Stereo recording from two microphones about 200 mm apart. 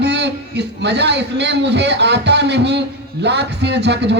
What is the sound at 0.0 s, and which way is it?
A man's voice, 60° right (ahead or behind).